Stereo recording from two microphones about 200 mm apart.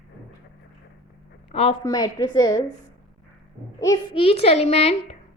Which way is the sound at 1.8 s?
20° left (ahead or behind).